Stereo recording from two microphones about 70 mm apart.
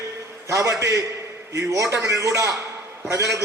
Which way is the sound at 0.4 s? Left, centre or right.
Right.